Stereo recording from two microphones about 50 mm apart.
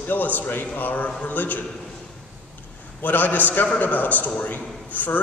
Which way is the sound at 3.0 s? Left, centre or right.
Left.